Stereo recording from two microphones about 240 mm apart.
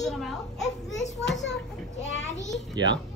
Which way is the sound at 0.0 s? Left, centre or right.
Centre.